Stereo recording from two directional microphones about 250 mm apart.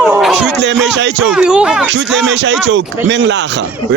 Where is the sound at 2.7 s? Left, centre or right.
Right.